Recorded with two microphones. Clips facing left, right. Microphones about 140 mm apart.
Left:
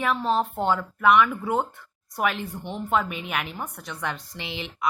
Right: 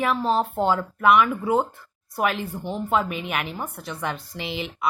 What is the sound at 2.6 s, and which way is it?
Speech, 35° right (ahead or behind).